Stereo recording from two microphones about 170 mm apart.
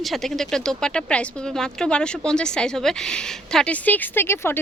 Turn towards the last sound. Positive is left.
turn(degrees=15)  # may be behind; listen again after turning